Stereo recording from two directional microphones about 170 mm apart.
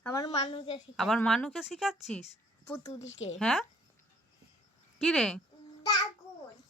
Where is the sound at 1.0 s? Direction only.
5° left (ahead or behind).